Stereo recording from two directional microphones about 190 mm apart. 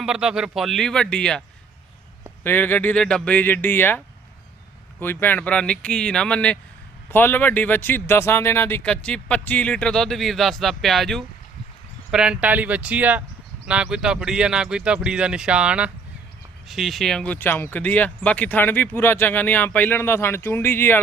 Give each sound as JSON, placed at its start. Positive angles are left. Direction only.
{"t": 0.0, "sound": "speech", "side_deg": -5}
{"t": 2.4, "sound": "speech", "side_deg": 10}